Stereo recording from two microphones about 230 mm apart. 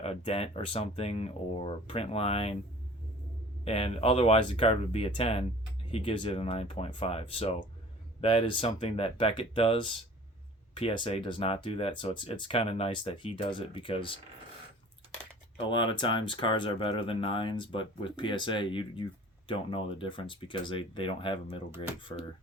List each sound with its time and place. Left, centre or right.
0.0 s speech: left
3.6 s speech: left
15.5 s speech: left